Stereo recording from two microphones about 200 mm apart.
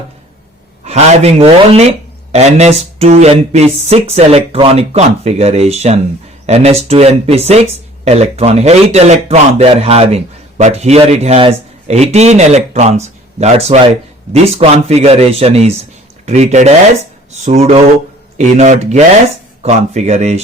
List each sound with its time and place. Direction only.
0.9 s speech: 30° right (ahead or behind)